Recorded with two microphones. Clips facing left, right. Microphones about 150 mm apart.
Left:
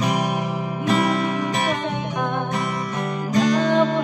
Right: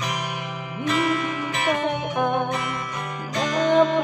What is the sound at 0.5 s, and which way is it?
Music, 40° left (ahead or behind).